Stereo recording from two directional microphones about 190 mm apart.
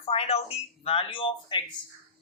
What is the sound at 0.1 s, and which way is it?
A man's voice, 35° left (ahead or behind).